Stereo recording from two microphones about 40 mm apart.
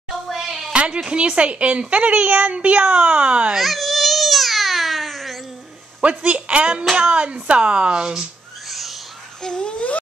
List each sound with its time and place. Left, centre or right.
0.3 s a sound: centre
0.7 s music: right
1.1 s a child's voice: right
3.5 s baby cry: centre
6.0 s a child's voice: right
8.6 s owl: centre
9.4 s a sound: left